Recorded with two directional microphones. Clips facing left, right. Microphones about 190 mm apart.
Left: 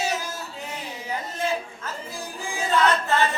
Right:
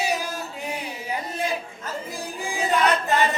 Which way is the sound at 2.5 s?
15° right (ahead or behind).